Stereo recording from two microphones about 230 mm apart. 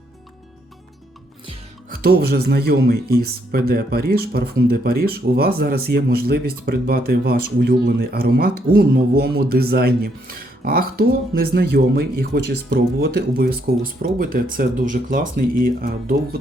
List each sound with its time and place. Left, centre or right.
1.9 s speech: right